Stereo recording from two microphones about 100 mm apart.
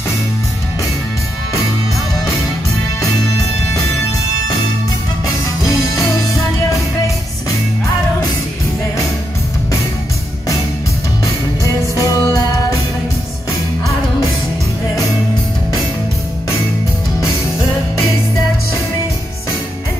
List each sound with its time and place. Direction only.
5.7 s music: 35° left (ahead or behind)
11.9 s music: 30° left (ahead or behind)